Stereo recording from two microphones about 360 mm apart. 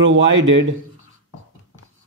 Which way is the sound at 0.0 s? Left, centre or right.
Right.